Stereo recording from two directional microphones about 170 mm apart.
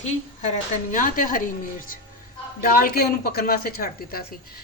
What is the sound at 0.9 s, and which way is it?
A man's voice, 55° left (ahead or behind).